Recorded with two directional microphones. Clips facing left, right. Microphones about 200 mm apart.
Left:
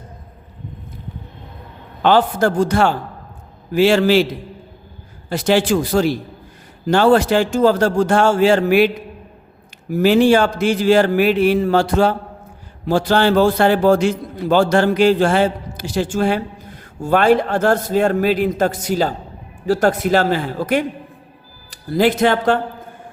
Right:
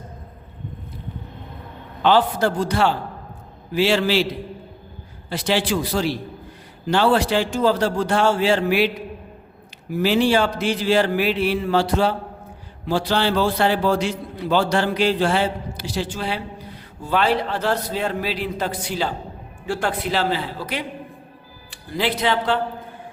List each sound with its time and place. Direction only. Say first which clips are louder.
2.0 s a man's voice: left 3 dB; 50° left (ahead or behind)
5.3 s a man's voice: left 6 dB; 45° left (ahead or behind)
9.9 s a man's voice: left 6 dB; 50° left (ahead or behind)